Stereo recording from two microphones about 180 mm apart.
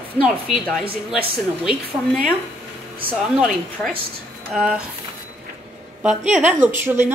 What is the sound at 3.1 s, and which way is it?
Speech, centre (ahead or behind).